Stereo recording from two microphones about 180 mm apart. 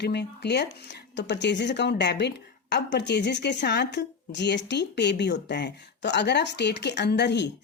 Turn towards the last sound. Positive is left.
turn(degrees=70)  # may be behind; listen again after turning